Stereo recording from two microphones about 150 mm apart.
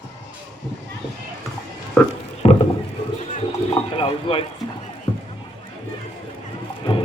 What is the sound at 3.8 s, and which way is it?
Speech, 40° left (ahead or behind).